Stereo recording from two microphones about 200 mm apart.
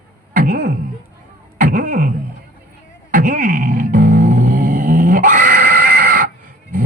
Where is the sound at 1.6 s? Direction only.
45° right (ahead or behind).